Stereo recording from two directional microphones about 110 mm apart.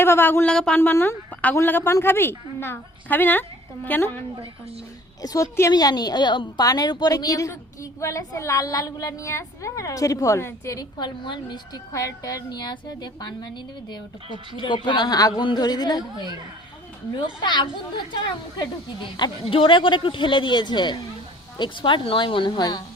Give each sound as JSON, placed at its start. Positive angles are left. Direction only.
{"t": 0.0, "sound": "a woman's voice", "side_deg": 20}
{"t": 0.5, "sound": "a woman's voice", "side_deg": 5}
{"t": 0.8, "sound": "a woman's voice", "side_deg": 20}
{"t": 5.2, "sound": "a woman's voice", "side_deg": 30}
{"t": 14.6, "sound": "a woman's voice", "side_deg": 45}
{"t": 17.2, "sound": "speech", "side_deg": 45}